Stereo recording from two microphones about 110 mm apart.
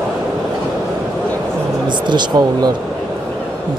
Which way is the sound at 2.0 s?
40° right (ahead or behind).